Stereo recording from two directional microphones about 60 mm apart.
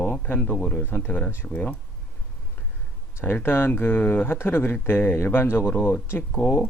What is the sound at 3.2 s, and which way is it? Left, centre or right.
Speech, left.